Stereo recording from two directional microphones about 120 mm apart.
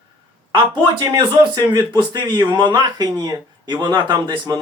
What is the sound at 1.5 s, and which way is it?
Speech, 35° right (ahead or behind).